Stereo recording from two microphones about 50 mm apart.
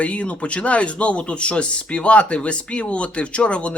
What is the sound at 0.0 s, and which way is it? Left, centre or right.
Speech, left.